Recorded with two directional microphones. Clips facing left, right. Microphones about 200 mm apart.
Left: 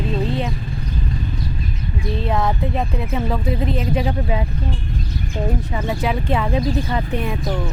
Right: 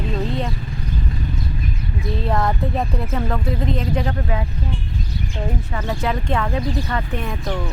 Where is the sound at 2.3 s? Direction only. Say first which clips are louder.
Even; centre (ahead or behind); by 4.4 s 15° left (ahead or behind).